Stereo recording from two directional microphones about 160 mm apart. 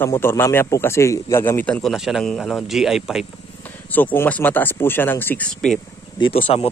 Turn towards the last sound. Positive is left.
turn(degrees=40)  # may be behind; listen again after turning